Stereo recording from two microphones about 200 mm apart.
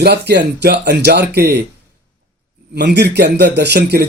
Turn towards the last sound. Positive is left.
turn(degrees=-55)  # may be behind; listen again after turning